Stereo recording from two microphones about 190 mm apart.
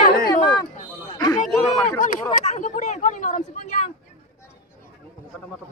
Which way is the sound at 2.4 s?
40° left (ahead or behind).